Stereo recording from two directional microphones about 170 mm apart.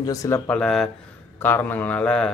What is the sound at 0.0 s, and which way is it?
Speech, 20° left (ahead or behind).